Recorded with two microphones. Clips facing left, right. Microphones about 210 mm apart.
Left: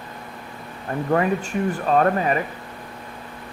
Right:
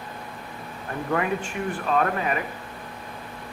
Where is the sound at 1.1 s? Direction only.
40° left (ahead or behind).